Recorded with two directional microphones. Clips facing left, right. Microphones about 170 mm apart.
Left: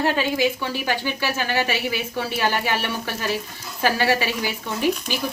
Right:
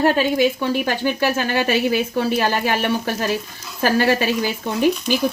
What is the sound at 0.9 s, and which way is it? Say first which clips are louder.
Speech: right 5 dB; 50° right (ahead or behind).